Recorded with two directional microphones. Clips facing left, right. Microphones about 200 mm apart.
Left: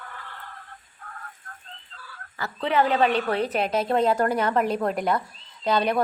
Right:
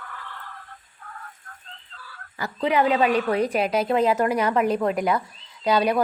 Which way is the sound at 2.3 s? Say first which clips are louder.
Right 1 dB; 15° right (ahead or behind).